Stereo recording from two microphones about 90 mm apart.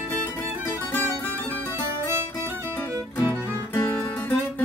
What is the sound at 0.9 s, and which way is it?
Music, 20° left (ahead or behind).